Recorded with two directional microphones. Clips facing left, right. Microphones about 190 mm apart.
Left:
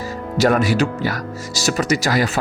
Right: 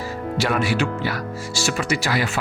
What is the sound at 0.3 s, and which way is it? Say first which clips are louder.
Speech: left 6 dB; 45° left (ahead or behind).